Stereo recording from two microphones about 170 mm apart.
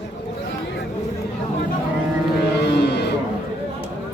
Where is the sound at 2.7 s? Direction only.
80° left.